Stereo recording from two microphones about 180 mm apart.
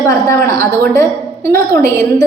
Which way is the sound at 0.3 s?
15° left (ahead or behind).